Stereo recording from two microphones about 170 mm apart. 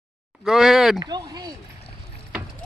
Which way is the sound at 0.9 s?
25° right (ahead or behind).